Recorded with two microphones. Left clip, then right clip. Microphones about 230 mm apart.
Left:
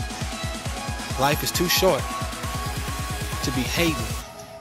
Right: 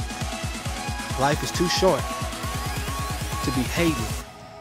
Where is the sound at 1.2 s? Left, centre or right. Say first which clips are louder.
Left 1 dB; centre.